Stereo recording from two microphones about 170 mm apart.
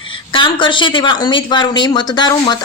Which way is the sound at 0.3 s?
30° left (ahead or behind).